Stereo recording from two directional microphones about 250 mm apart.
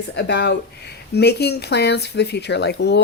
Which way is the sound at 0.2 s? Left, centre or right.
Left.